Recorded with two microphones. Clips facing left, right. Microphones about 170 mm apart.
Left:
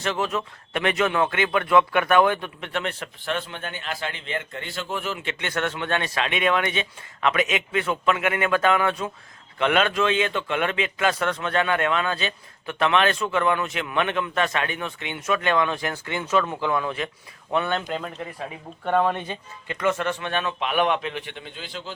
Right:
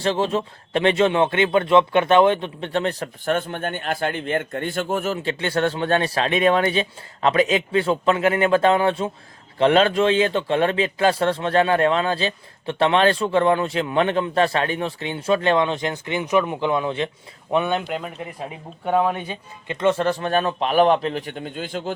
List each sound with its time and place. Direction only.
0.0 s speech: 30° right (ahead or behind); by 21.9 s 50° right (ahead or behind)